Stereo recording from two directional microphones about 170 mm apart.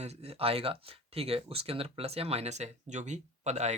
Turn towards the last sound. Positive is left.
turn(degrees=-40)  # may be behind; listen again after turning